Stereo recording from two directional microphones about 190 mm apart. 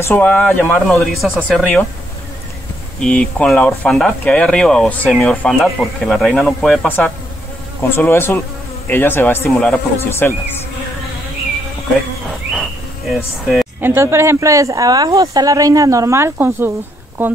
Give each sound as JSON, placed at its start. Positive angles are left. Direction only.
{"t": 0.0, "sound": "speech", "side_deg": 10}
{"t": 3.0, "sound": "speech", "side_deg": 5}
{"t": 13.7, "sound": "speech", "side_deg": -10}